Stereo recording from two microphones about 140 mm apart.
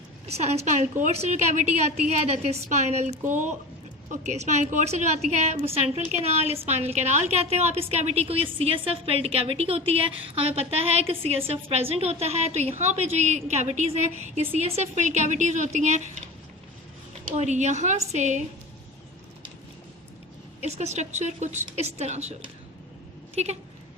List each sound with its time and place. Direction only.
0.3 s a woman's voice: 50° right (ahead or behind)
17.2 s a woman's voice: 55° right (ahead or behind)
20.6 s a woman's voice: 50° right (ahead or behind)
23.3 s a sound: 50° right (ahead or behind)